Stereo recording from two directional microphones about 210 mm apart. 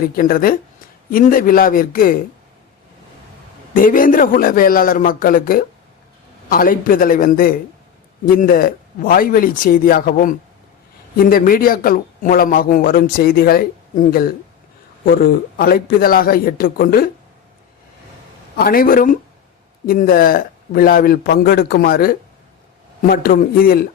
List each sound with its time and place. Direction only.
0.2 s a man's voice: 45° left (ahead or behind)
3.8 s a man's voice: 40° left (ahead or behind)
18.5 s a man's voice: 45° left (ahead or behind)